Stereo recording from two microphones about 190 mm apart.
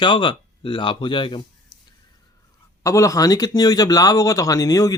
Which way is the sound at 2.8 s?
15° left (ahead or behind).